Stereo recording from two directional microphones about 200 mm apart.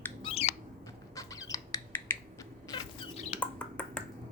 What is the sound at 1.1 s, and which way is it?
Squeak, 15° left (ahead or behind).